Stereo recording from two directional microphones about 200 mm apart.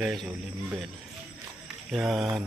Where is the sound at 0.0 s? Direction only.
Centre (ahead or behind).